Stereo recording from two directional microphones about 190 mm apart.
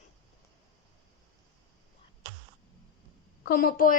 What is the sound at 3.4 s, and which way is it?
Speech, 50° left (ahead or behind).